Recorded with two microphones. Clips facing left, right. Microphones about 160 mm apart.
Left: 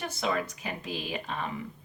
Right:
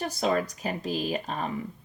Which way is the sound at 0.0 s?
35° right (ahead or behind).